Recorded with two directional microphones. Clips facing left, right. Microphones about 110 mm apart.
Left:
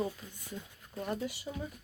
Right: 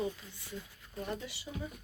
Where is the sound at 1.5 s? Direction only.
25° left (ahead or behind).